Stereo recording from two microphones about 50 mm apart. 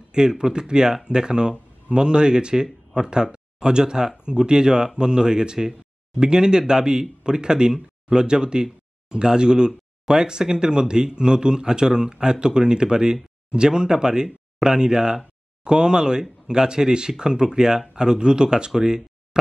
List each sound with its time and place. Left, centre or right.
0.1 s speech: centre